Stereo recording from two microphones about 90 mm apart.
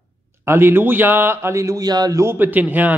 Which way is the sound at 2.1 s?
25° right (ahead or behind).